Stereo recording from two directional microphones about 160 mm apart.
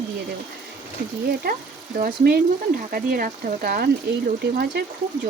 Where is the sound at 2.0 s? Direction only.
60° right (ahead or behind).